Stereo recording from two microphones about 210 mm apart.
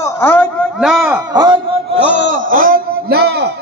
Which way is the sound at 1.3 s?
20° right (ahead or behind).